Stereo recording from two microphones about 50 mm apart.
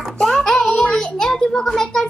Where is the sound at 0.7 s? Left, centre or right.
Left.